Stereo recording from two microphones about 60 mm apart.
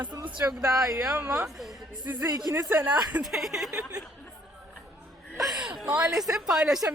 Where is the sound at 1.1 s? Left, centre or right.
Right.